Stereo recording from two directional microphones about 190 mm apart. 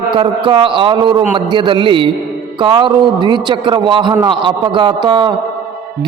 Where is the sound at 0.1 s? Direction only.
25° right (ahead or behind).